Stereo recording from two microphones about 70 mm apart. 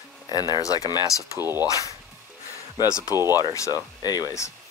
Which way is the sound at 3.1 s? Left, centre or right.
Right.